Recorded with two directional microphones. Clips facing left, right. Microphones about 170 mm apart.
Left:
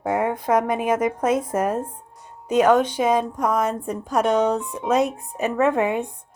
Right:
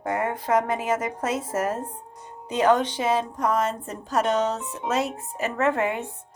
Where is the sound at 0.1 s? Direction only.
15° left (ahead or behind).